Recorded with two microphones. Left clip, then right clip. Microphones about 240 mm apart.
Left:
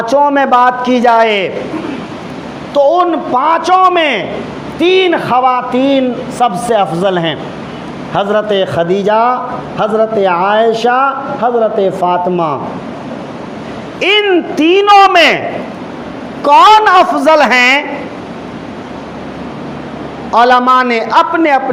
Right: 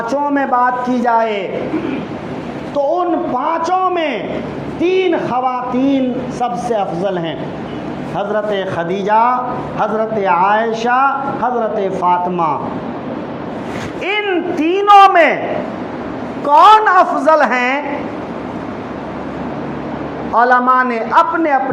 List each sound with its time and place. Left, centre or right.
0.0 s a man's voice: left
2.7 s a man's voice: left
14.0 s a man's voice: left
16.4 s a man's voice: left
20.3 s a man's voice: left